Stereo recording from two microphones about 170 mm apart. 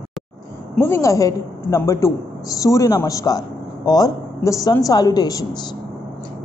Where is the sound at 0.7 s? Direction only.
15° left (ahead or behind).